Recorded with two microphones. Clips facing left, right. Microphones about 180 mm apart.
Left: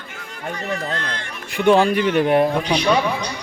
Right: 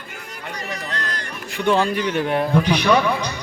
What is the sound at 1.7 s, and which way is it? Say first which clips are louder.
Speech: left 4 dB; 15° left (ahead or behind).